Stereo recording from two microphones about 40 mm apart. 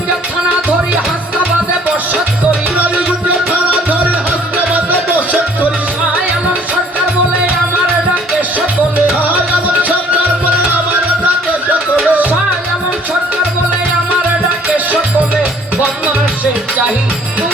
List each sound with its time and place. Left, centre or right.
2.7 s music: right
12.0 s music: right